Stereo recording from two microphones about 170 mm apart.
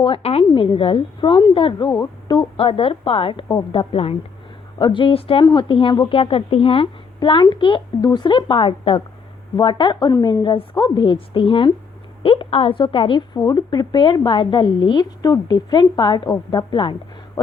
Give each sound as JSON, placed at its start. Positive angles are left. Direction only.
{"t": 0.0, "sound": "a woman's voice", "side_deg": 35}